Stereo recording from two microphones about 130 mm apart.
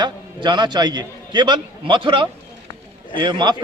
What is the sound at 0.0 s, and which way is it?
A man's voice, 35° right (ahead or behind).